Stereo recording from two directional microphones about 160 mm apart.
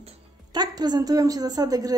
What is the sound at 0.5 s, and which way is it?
A woman's voice, 25° right (ahead or behind).